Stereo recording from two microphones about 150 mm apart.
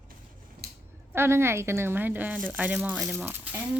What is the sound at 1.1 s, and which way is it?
Speech, 15° right (ahead or behind).